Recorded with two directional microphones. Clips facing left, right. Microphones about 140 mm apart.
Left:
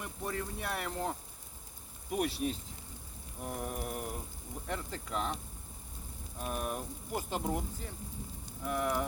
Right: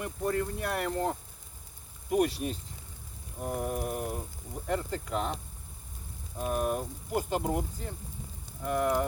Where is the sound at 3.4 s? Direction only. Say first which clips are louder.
Right 6 dB; 50° right (ahead or behind).